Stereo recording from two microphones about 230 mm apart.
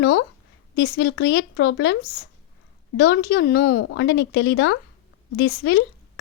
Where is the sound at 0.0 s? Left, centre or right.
Left.